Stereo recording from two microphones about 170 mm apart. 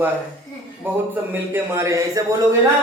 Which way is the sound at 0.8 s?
10° right (ahead or behind).